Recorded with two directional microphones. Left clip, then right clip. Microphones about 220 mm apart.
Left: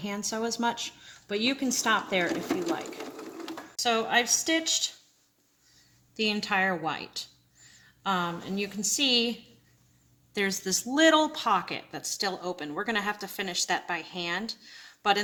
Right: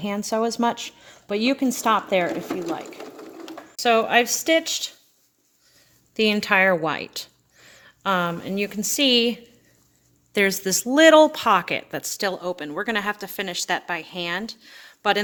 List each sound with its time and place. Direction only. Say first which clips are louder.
0.0 s speech: right 8 dB; 45° right (ahead or behind)
3.8 s speech: right 7 dB; 50° right (ahead or behind)
6.1 s a woman's voice: right 8 dB; 50° right (ahead or behind)
10.3 s speech: right 8 dB; 45° right (ahead or behind)